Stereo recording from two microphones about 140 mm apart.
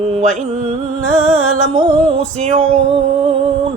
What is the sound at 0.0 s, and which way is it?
Music, 50° right (ahead or behind).